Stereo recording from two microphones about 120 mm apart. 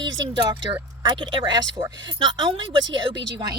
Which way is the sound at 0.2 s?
40° right (ahead or behind).